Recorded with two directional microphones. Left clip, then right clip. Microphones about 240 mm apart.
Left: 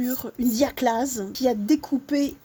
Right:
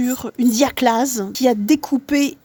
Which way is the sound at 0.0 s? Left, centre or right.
Right.